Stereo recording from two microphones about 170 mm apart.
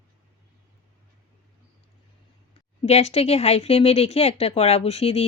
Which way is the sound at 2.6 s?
40° left (ahead or behind).